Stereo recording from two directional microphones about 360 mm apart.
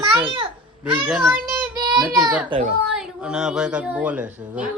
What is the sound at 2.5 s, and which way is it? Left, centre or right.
Speech, centre.